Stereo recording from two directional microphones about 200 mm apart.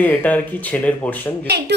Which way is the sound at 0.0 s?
10° left (ahead or behind).